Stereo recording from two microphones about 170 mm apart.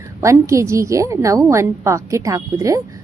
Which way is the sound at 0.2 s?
15° right (ahead or behind).